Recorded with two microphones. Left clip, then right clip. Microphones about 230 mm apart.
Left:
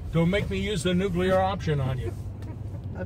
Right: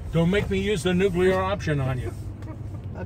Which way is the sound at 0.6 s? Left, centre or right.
Centre.